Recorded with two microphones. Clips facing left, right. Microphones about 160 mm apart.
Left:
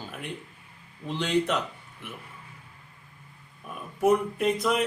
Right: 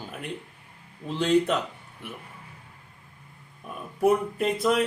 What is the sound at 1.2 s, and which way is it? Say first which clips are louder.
Speech: right 4 dB; 5° right (ahead or behind).